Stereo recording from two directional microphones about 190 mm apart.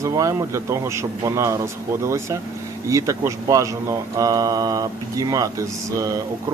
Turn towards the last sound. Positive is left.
turn(degrees=-20)  # may be behind; listen again after turning